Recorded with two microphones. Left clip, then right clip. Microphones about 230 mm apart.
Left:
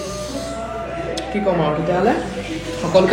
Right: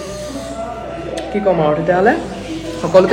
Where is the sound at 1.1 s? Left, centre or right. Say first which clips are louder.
Right 5 dB; right.